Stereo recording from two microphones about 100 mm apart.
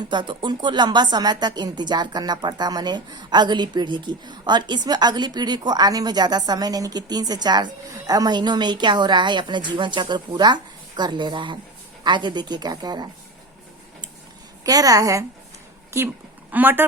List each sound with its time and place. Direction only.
0.0 s speech: 50° right (ahead or behind)
14.6 s a woman's voice: 35° right (ahead or behind)
16.5 s speech: 20° right (ahead or behind)